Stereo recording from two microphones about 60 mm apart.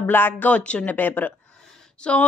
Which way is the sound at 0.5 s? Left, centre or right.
Left.